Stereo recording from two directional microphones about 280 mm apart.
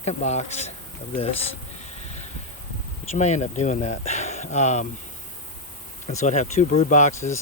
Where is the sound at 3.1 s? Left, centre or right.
Left.